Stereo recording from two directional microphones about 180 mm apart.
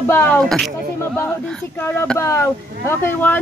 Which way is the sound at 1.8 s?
10° left (ahead or behind).